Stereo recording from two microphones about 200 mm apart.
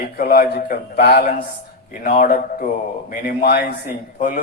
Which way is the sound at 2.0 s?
40° left (ahead or behind).